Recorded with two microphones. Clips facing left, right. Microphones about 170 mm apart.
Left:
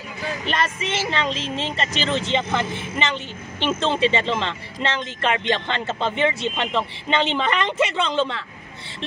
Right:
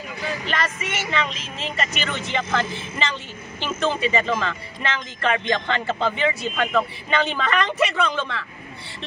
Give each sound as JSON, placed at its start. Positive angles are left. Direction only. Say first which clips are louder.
{"t": 0.5, "sound": "speech", "louder": "left 5 dB", "side_deg": 30}